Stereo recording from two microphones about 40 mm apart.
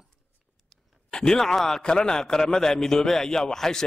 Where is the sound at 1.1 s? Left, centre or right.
Centre.